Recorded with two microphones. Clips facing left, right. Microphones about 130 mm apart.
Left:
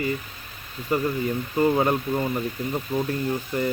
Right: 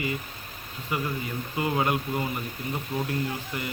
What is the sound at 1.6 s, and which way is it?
Speech, 35° left (ahead or behind).